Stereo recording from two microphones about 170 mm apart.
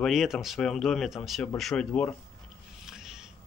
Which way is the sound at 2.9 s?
5° right (ahead or behind).